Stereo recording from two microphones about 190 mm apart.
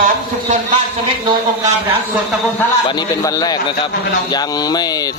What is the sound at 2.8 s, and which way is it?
Speech, 20° left (ahead or behind).